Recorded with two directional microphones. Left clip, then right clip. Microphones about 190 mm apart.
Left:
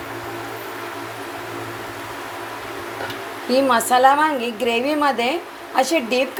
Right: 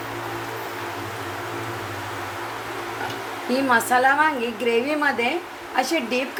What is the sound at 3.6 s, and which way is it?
A woman's voice, 20° left (ahead or behind).